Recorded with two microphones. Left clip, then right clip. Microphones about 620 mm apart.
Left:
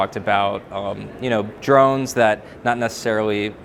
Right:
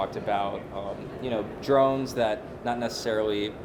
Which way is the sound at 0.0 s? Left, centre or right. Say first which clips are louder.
Left 9 dB; left.